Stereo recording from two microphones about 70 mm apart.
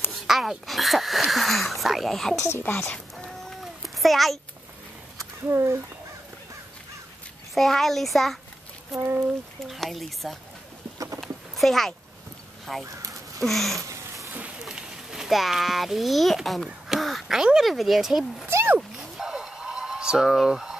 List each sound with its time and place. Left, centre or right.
0.1 s speech: centre
2.4 s a woman's voice: left
3.6 s cat: centre
5.5 s speech: right
7.5 s speech: centre
8.9 s speech: right
9.7 s speech: centre
11.1 s a sound: centre
12.7 s speech: centre
13.8 s a sound: right
14.6 s a child's voice: centre
18.8 s a sound: centre